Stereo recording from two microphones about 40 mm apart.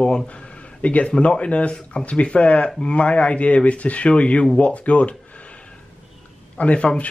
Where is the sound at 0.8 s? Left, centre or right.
Left.